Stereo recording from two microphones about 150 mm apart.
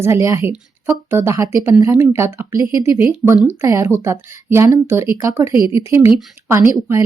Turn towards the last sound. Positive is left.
turn(degrees=-20)  # may be behind; listen again after turning